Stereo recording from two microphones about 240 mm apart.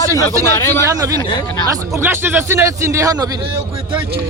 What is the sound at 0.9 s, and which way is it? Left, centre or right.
A man's voice, centre.